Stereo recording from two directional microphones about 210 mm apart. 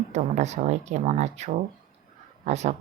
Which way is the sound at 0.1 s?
35° right (ahead or behind).